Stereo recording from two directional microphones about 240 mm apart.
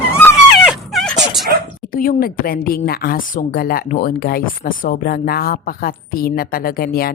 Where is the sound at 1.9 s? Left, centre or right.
Left.